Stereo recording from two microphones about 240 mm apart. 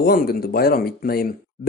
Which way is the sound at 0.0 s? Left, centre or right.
Left.